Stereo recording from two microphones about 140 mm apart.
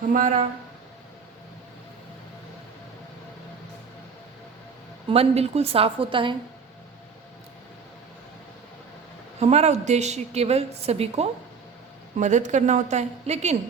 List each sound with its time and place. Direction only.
0.1 s speech: 65° right (ahead or behind)
5.0 s a woman's voice: 45° right (ahead or behind)
9.4 s a woman's voice: 50° right (ahead or behind)
12.2 s a woman's voice: 60° right (ahead or behind)